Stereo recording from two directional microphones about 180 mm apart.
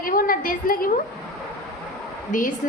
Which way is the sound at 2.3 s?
45° left (ahead or behind).